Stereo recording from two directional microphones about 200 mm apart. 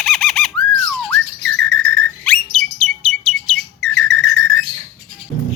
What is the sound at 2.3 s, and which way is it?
Bird, 5° left (ahead or behind).